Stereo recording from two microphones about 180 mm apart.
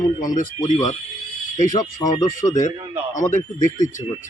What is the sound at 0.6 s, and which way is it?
Speech, 20° left (ahead or behind).